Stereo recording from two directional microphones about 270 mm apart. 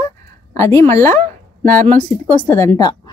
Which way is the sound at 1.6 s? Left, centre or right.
Right.